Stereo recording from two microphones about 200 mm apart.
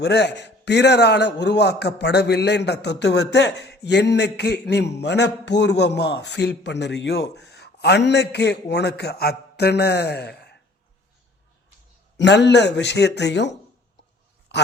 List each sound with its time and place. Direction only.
0.0 s a man's voice: 55° left (ahead or behind)
12.1 s a man's voice: 60° left (ahead or behind)
14.5 s a sound: 60° left (ahead or behind)